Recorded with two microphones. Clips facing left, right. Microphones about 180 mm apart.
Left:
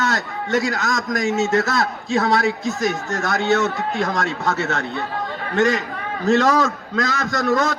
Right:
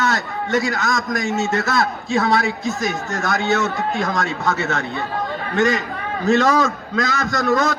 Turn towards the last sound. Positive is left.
turn(degrees=30)  # may be behind; listen again after turning